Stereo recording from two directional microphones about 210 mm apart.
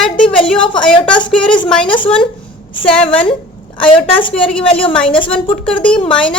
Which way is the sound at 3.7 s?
25° left (ahead or behind).